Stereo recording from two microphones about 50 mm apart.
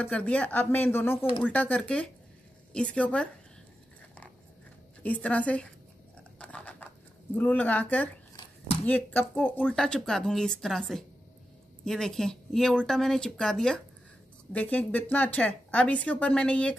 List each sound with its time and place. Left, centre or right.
0.0 s a woman's voice: left
1.4 s a woman's voice: left
5.0 s a woman's voice: left
6.3 s a sound: left
7.3 s a woman's voice: left
10.0 s a woman's voice: centre
14.5 s a woman's voice: left